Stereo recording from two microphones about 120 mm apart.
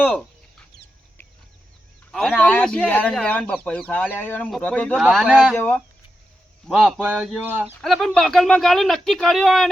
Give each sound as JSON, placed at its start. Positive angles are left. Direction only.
{"t": 0.0, "sound": "speech", "side_deg": 10}
{"t": 2.1, "sound": "speech", "side_deg": 5}
{"t": 4.9, "sound": "speech", "side_deg": -5}
{"t": 5.5, "sound": "speech", "side_deg": 15}
{"t": 6.7, "sound": "speech", "side_deg": -5}
{"t": 7.4, "sound": "speech", "side_deg": -15}
{"t": 7.8, "sound": "speech", "side_deg": 5}